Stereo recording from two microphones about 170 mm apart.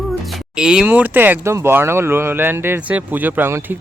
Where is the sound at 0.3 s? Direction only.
5° right (ahead or behind).